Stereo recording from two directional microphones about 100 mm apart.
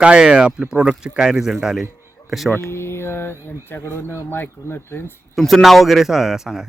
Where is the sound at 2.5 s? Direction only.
25° left (ahead or behind).